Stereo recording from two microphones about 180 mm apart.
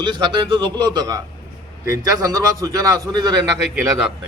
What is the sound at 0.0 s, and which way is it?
A man's voice, 25° right (ahead or behind).